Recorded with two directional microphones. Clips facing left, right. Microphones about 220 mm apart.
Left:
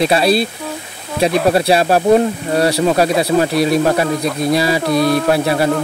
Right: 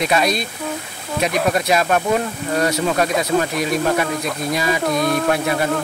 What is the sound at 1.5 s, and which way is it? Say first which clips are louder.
Speech: left 4 dB; 30° left (ahead or behind).